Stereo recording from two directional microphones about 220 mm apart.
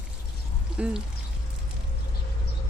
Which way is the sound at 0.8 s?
5° right (ahead or behind).